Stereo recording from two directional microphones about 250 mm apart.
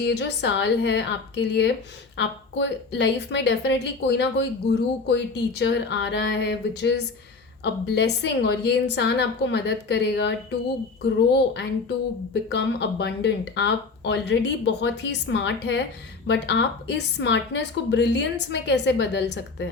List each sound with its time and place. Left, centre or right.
0.0 s a woman's voice: left
12.3 s a woman's voice: left